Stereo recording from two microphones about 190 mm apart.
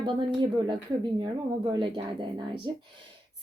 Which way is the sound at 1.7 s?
25° right (ahead or behind).